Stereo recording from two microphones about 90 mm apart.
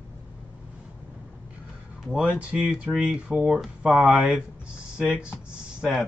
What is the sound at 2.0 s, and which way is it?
Speech, 5° right (ahead or behind).